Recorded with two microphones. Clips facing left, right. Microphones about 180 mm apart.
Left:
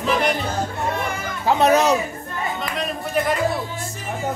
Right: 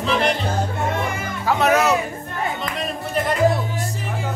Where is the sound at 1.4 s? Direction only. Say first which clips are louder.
Left 2 dB; 30° left (ahead or behind).